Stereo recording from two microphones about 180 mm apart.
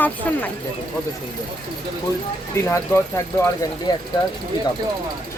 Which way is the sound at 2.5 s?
15° left (ahead or behind).